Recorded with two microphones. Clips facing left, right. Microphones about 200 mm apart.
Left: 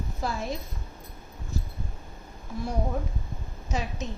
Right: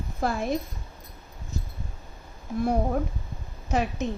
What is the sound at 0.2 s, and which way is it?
Speech, 55° right (ahead or behind).